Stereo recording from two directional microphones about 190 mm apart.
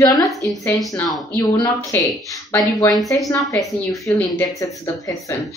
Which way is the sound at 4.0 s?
15° left (ahead or behind).